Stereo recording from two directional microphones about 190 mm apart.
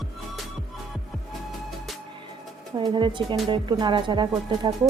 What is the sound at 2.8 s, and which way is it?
Speech, 25° right (ahead or behind).